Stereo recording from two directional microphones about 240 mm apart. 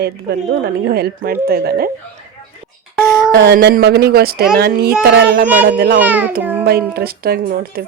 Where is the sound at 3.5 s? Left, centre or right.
Right.